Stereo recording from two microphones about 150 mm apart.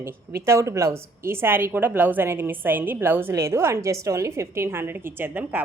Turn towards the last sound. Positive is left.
turn(degrees=-15)  # may be behind; listen again after turning